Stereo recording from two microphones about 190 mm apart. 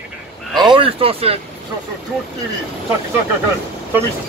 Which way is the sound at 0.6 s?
25° right (ahead or behind).